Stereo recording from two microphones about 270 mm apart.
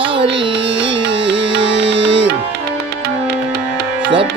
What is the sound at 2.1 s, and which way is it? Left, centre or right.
Music, right.